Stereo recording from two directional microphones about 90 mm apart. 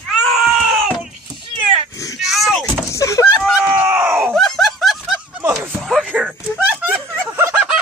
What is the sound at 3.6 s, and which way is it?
Groan, 25° right (ahead or behind).